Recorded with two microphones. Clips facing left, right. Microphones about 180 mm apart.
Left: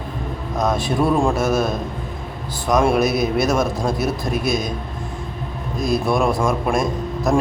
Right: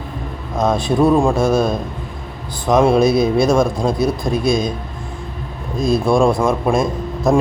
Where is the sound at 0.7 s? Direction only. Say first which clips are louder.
Right 5 dB; 20° right (ahead or behind).